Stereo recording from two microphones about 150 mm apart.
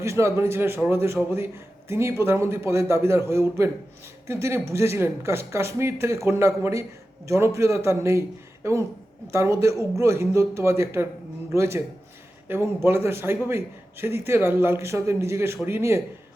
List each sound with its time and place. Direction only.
0.0 s a man's voice: 20° right (ahead or behind)